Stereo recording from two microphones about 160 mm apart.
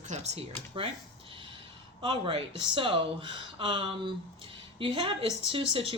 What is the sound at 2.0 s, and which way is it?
Speech, 30° right (ahead or behind).